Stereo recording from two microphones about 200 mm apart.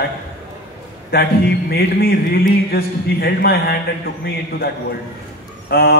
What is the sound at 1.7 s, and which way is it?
Music, 55° left (ahead or behind).